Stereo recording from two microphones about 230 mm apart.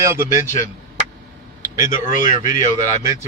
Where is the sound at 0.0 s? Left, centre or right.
Centre.